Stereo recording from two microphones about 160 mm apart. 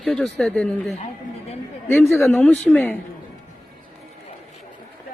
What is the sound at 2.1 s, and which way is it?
Speech, 5° left (ahead or behind).